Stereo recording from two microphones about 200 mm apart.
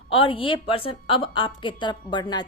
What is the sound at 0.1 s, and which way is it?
A woman's voice, 25° left (ahead or behind).